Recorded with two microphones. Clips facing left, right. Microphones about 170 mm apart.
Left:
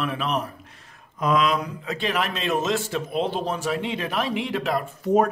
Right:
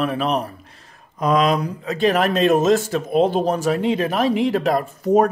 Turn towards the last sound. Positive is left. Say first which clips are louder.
# right 4 dB
turn(degrees=-40)  # may be behind; listen again after turning